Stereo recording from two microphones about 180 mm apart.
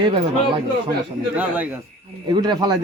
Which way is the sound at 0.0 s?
30° right (ahead or behind).